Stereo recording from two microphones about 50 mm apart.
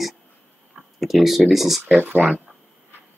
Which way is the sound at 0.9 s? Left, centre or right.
Centre.